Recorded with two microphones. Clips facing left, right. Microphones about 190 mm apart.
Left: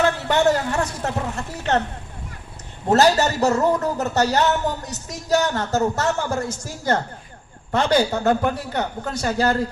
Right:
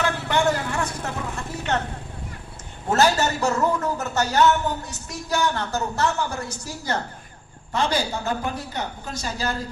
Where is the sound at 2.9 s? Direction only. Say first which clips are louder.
Left 4 dB; 35° left (ahead or behind).